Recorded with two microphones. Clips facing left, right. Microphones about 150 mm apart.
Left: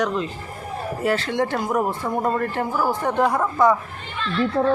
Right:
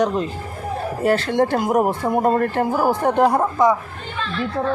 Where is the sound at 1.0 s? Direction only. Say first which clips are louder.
Right 4 dB; 45° right (ahead or behind).